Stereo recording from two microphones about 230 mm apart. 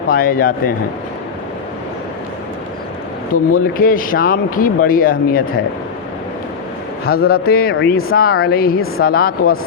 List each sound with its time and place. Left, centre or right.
0.1 s speech: left
3.3 s speech: left
7.1 s speech: left